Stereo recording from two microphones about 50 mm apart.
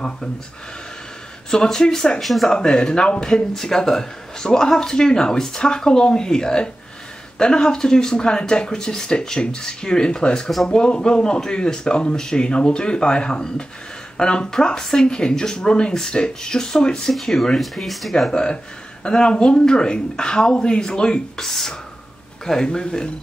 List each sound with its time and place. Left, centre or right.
1.5 s speech: centre
2.5 s speech: centre
17.1 s speech: centre
18.3 s speech: centre